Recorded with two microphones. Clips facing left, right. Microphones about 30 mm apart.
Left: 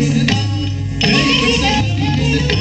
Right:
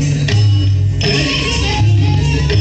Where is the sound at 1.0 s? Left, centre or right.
Left.